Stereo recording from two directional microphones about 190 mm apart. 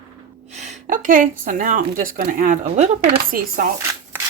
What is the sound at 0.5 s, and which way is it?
A woman's voice, 35° right (ahead or behind).